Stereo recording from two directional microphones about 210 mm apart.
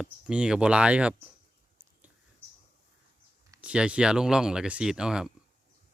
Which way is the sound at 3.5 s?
5° right (ahead or behind).